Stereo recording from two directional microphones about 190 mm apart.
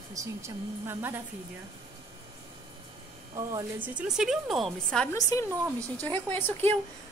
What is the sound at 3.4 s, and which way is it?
Speech, 20° right (ahead or behind).